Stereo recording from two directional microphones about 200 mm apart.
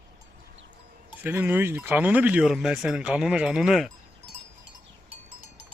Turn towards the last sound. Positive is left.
turn(degrees=0)  # may be behind; listen again after turning